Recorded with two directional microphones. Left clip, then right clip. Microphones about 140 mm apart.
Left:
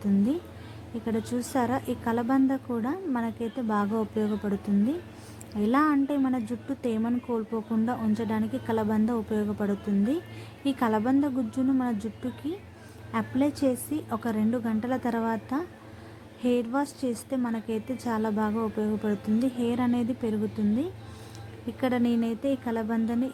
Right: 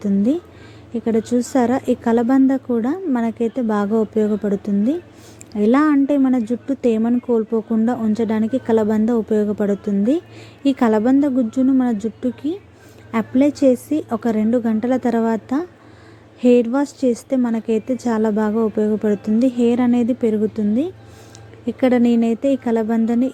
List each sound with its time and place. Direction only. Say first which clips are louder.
1.0 s a woman's voice: right 12 dB; 30° right (ahead or behind)
21.8 s a woman's voice: right 11 dB; 35° right (ahead or behind)